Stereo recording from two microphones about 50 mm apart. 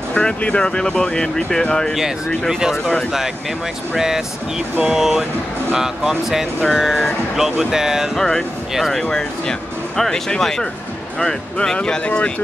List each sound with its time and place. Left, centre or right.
0.1 s speech: left
2.0 s speech: centre
3.9 s speech: centre
8.2 s speech: centre